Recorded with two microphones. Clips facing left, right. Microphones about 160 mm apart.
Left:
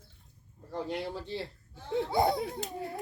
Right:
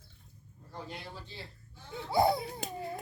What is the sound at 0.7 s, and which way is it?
Speech, 75° left (ahead or behind).